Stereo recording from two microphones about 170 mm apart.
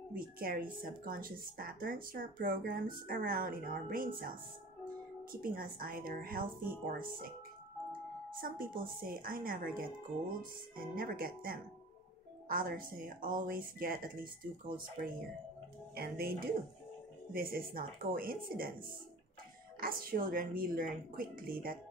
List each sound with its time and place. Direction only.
0.1 s speech: 55° right (ahead or behind)
8.4 s speech: 55° right (ahead or behind)
19.8 s speech: 60° right (ahead or behind)